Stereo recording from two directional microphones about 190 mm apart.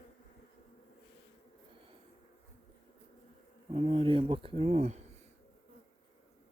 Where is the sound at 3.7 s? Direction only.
30° right (ahead or behind).